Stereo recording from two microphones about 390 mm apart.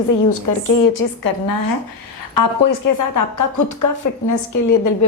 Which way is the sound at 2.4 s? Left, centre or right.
Left.